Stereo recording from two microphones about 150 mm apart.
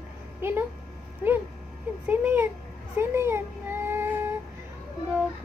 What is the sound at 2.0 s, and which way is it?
Speech, 15° right (ahead or behind).